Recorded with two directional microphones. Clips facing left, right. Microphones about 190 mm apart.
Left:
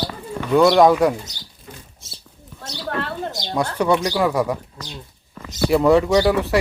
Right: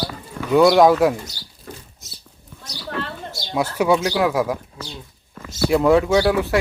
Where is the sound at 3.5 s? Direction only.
5° right (ahead or behind).